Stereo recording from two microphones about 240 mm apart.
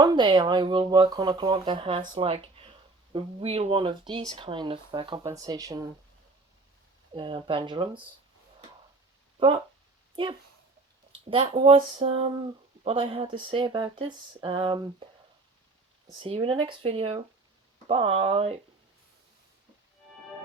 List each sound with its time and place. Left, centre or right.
0.0 s speech: centre
7.1 s speech: centre
11.3 s speech: right
16.2 s speech: right